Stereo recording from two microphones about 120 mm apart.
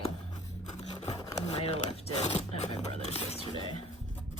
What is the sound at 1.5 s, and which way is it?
Speech, 60° left (ahead or behind).